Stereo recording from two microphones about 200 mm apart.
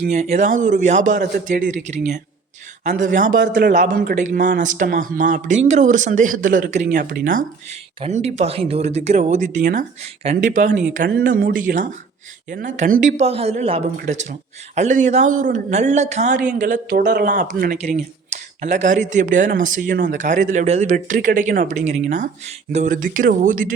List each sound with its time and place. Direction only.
0.0 s speech: 35° right (ahead or behind)
17.0 s speech: 55° right (ahead or behind)
17.2 s speech: 45° right (ahead or behind)
17.8 s speech: 35° right (ahead or behind)